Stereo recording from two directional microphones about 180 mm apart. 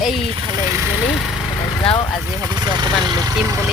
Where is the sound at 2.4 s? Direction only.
25° right (ahead or behind).